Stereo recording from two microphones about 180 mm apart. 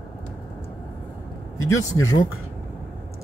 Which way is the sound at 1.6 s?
15° left (ahead or behind).